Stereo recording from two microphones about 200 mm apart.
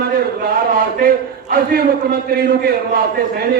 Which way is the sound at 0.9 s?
50° right (ahead or behind).